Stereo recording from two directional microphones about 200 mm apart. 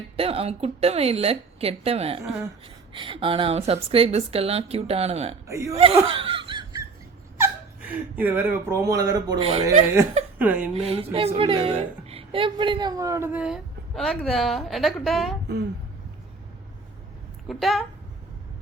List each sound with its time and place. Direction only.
0.2 s a woman's voice: 30° right (ahead or behind)
5.5 s a woman's voice: 15° right (ahead or behind)
5.7 s laughter: 30° right (ahead or behind)
7.3 s speech: 10° right (ahead or behind); by 9.6 s 30° right (ahead or behind)
10.3 s speech: 10° right (ahead or behind)
10.8 s a woman's voice: 30° right (ahead or behind); by 15.4 s centre (ahead or behind)
17.5 s a woman's voice: centre (ahead or behind)